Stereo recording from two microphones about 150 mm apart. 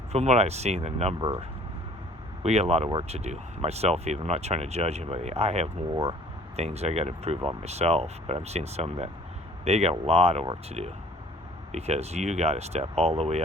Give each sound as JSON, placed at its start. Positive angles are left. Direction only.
{"t": 0.1, "sound": "speech", "side_deg": -45}
{"t": 2.4, "sound": "speech", "side_deg": -45}